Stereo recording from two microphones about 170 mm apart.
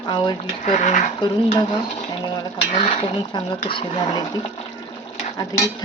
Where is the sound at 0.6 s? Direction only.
45° left (ahead or behind).